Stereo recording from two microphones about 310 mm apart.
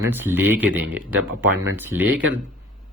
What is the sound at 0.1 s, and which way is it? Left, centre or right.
Speech, centre.